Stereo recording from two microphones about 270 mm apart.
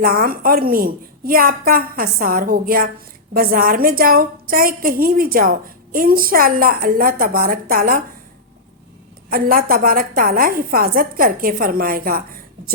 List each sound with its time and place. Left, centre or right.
0.0 s a woman's voice: right
9.3 s a woman's voice: right